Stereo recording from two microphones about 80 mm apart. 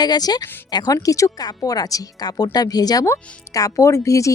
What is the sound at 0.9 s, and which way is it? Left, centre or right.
A woman's voice, left.